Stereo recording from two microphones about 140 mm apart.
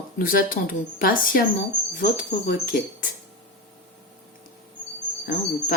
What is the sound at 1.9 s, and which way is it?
Speech, 70° left (ahead or behind).